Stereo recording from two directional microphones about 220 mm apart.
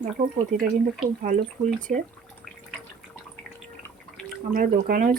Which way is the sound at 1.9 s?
35° right (ahead or behind).